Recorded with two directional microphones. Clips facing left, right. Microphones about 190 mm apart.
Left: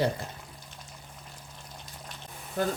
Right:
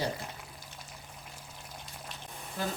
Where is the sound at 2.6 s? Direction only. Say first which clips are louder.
Left 7 dB; 55° left (ahead or behind).